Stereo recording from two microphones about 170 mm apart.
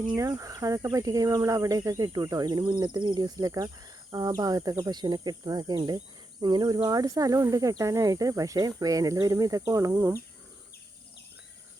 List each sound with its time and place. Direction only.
0.2 s speech: 20° right (ahead or behind)